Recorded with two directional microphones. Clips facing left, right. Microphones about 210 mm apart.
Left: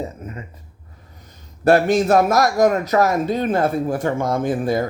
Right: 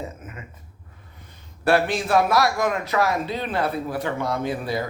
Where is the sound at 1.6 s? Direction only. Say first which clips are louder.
Left 6 dB; 45° left (ahead or behind).